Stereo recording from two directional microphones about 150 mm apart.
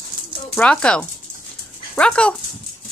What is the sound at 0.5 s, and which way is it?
Speech, 5° left (ahead or behind).